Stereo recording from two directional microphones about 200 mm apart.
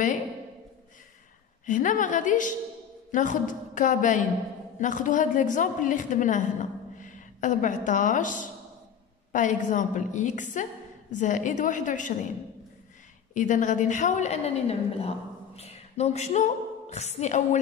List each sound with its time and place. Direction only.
1.7 s a woman's voice: 40° left (ahead or behind)
13.3 s a woman's voice: 40° left (ahead or behind)